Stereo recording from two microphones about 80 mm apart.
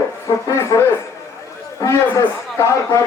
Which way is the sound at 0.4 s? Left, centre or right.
Left.